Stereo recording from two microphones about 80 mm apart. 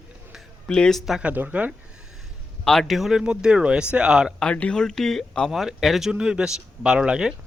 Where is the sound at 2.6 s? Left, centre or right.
Centre.